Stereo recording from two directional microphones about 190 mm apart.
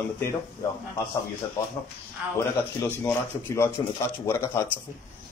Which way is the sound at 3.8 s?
20° left (ahead or behind).